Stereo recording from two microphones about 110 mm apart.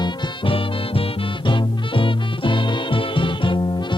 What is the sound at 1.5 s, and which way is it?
Swing music, 50° left (ahead or behind).